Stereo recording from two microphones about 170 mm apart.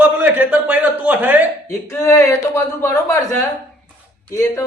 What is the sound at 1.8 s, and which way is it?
Speech, 15° left (ahead or behind).